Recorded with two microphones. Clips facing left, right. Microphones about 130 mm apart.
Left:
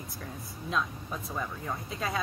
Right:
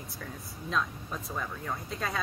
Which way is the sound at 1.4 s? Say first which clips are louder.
Left 1 dB; 5° left (ahead or behind).